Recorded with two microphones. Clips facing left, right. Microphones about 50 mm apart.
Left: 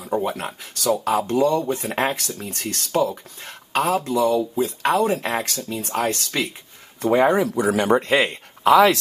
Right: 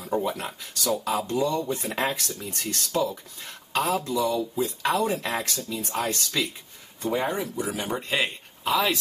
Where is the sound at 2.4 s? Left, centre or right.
Left.